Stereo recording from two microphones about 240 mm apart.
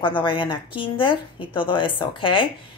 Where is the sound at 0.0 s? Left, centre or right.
Centre.